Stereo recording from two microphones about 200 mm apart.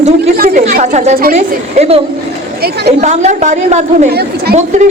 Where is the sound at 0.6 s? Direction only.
35° right (ahead or behind).